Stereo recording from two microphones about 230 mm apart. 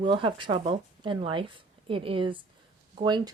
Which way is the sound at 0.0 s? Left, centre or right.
Right.